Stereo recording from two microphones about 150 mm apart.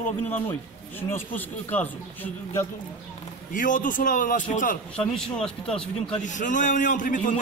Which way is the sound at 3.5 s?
60° left (ahead or behind).